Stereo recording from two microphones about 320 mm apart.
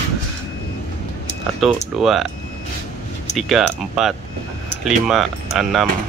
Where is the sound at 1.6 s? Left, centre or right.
Centre.